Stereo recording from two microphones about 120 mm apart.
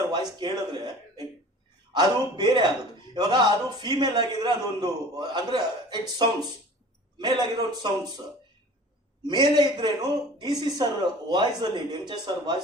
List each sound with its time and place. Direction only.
0.1 s a sound: 40° right (ahead or behind)
1.9 s a man's voice: 35° right (ahead or behind)
9.2 s a man's voice: 40° right (ahead or behind)